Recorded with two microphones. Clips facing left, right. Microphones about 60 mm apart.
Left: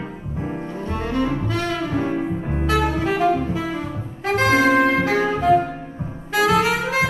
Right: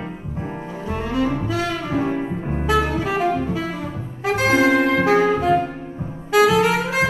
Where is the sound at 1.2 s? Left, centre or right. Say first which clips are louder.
Right 1 dB; centre.